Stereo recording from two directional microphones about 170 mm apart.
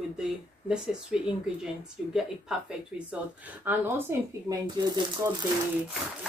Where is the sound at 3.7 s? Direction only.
15° right (ahead or behind).